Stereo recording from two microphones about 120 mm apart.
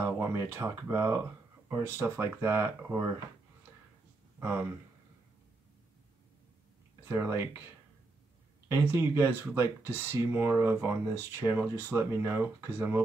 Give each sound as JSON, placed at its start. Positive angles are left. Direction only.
{"t": 0.0, "sound": "speech", "side_deg": -25}
{"t": 4.4, "sound": "speech", "side_deg": -20}
{"t": 7.1, "sound": "speech", "side_deg": -20}
{"t": 8.6, "sound": "speech", "side_deg": -20}